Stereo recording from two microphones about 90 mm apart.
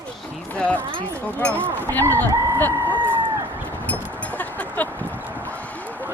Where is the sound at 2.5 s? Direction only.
20° left (ahead or behind).